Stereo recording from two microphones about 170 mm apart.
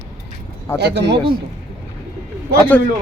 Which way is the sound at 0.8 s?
90° right.